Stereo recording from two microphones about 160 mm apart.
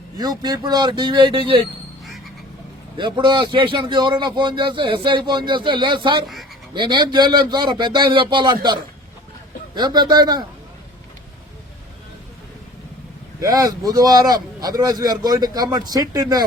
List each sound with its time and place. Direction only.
0.2 s a man's voice: 25° right (ahead or behind)
3.0 s a man's voice: 30° right (ahead or behind)
9.7 s a man's voice: 25° right (ahead or behind)
13.4 s a man's voice: 20° right (ahead or behind)